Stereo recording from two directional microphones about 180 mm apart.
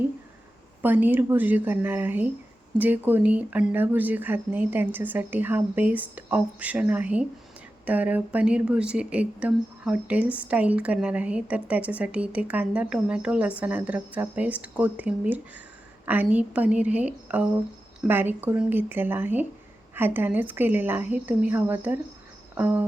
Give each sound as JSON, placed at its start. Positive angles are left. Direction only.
{"t": 0.8, "sound": "speech", "side_deg": -10}